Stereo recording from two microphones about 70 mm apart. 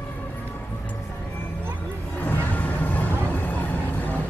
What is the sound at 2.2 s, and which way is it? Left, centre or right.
Music, left.